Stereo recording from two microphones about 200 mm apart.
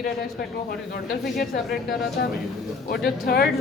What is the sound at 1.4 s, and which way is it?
Speech, 50° left (ahead or behind).